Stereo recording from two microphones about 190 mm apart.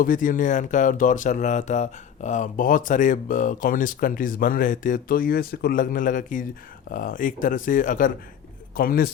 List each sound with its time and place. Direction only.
0.0 s a man's voice: 45° left (ahead or behind)